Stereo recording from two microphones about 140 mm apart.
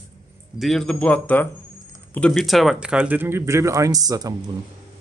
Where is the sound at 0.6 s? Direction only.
Centre (ahead or behind).